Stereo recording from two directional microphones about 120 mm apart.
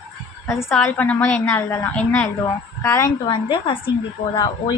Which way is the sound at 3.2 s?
45° left (ahead or behind).